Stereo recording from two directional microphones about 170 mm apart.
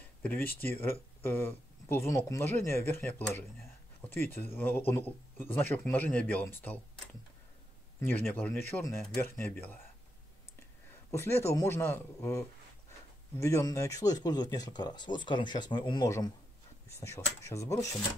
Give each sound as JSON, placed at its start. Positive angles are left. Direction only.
{"t": 0.0, "sound": "a sound", "side_deg": 10}
{"t": 0.6, "sound": "speech", "side_deg": 15}
{"t": 8.1, "sound": "speech", "side_deg": 10}
{"t": 11.1, "sound": "speech", "side_deg": 15}